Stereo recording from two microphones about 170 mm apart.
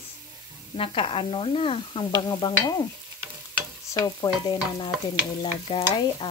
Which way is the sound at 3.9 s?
20° left (ahead or behind).